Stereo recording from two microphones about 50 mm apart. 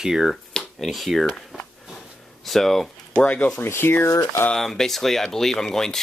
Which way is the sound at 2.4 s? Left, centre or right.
Centre.